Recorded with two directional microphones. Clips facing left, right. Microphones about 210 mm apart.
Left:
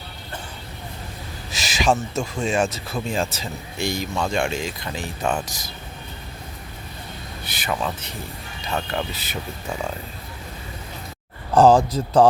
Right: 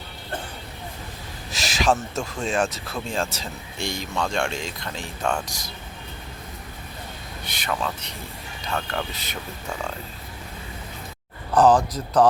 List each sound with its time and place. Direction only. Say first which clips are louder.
1.5 s speech: left 1 dB; centre (ahead or behind)
7.4 s speech: left 2 dB; 5° left (ahead or behind)
11.5 s speech: left 3 dB; 25° left (ahead or behind)